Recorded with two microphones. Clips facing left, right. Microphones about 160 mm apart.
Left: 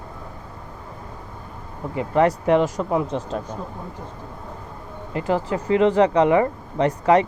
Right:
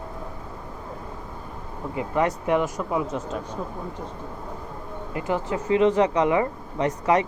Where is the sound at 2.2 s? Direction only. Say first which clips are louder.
Left 5 dB; 35° left (ahead or behind).